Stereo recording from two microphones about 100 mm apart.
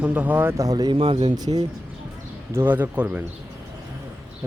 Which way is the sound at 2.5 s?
20° right (ahead or behind).